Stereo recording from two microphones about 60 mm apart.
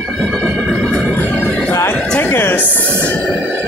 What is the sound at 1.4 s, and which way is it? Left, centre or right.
Music, centre.